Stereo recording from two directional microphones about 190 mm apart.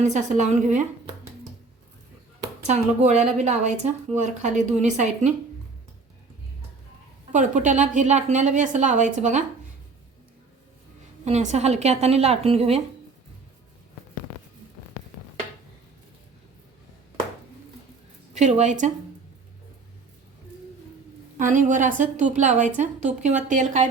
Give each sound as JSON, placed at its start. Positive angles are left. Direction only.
{"t": 0.0, "sound": "a woman's voice", "side_deg": -40}
{"t": 2.6, "sound": "a woman's voice", "side_deg": -35}
{"t": 7.3, "sound": "a woman's voice", "side_deg": -40}
{"t": 11.3, "sound": "a woman's voice", "side_deg": -35}
{"t": 18.3, "sound": "a woman's voice", "side_deg": -40}
{"t": 21.3, "sound": "a woman's voice", "side_deg": -40}